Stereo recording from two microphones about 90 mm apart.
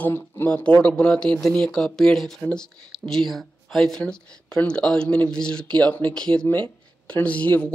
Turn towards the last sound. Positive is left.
turn(degrees=20)  # may be behind; listen again after turning